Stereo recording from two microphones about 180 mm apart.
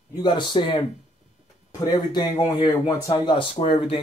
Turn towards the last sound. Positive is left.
turn(degrees=30)  # may be behind; listen again after turning